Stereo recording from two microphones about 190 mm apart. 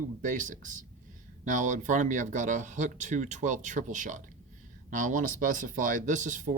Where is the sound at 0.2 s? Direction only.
40° right (ahead or behind).